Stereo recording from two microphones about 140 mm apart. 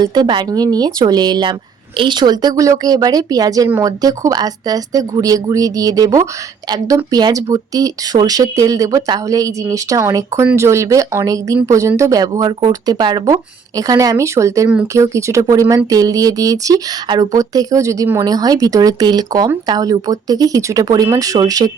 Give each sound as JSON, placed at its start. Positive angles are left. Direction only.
{"t": 0.0, "sound": "speech", "side_deg": -30}